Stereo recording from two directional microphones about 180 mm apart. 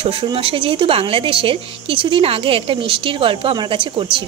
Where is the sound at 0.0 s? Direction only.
30° right (ahead or behind).